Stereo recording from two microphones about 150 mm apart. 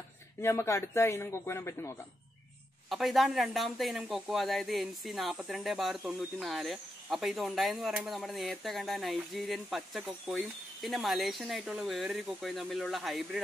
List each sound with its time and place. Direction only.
0.4 s speech: 15° left (ahead or behind)
2.9 s speech: centre (ahead or behind)